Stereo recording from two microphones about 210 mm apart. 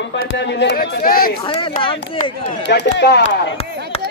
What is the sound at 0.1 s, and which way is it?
A man's voice, 55° left (ahead or behind).